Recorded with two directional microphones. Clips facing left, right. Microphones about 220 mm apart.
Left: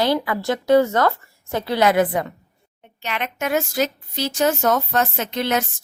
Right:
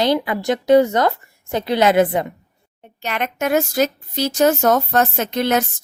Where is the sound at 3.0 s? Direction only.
45° right (ahead or behind).